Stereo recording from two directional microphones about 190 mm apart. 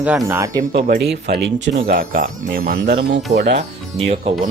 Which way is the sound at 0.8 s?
55° right (ahead or behind).